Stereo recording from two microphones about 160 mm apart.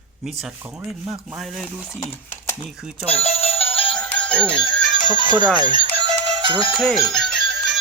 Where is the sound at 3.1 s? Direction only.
40° left (ahead or behind).